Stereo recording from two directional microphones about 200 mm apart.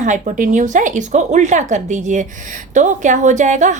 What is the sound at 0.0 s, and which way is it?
A woman's voice, 40° right (ahead or behind).